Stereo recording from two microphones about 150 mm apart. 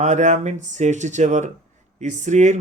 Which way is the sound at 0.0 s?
50° right (ahead or behind).